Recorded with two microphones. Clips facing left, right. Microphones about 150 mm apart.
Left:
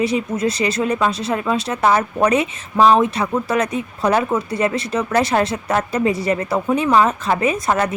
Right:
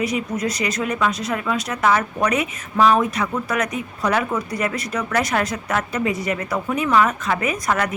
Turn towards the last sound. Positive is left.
turn(degrees=30)  # may be behind; listen again after turning